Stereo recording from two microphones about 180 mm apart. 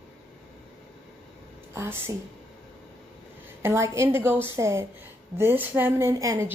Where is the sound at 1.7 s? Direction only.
15° right (ahead or behind).